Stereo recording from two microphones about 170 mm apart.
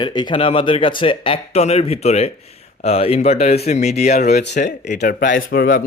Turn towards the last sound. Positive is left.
turn(degrees=55)  # may be behind; listen again after turning